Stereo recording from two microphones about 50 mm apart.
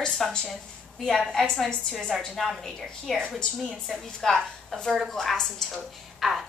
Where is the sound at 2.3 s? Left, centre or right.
Centre.